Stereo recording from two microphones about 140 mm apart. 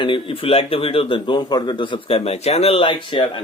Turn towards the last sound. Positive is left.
turn(degrees=35)  # may be behind; listen again after turning